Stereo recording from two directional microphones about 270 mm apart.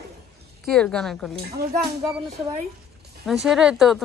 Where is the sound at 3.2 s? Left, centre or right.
Centre.